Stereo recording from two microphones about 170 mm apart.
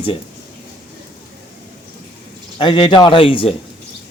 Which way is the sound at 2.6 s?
30° left (ahead or behind).